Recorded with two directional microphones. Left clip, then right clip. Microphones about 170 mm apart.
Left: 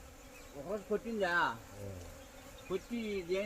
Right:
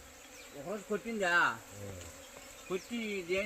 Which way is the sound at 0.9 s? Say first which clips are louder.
Right 3 dB; 30° right (ahead or behind).